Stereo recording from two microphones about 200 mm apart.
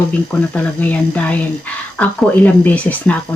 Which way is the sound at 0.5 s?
10° left (ahead or behind).